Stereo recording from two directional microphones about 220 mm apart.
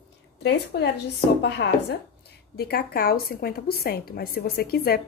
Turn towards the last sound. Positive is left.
turn(degrees=45)  # may be behind; listen again after turning